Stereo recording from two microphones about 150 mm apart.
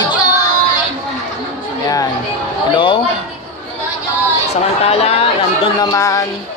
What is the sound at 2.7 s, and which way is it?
Speech, 35° left (ahead or behind).